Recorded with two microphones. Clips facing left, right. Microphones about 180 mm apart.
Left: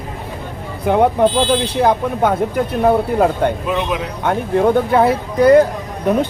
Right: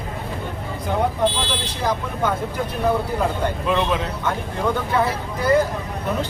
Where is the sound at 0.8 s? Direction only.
60° left (ahead or behind).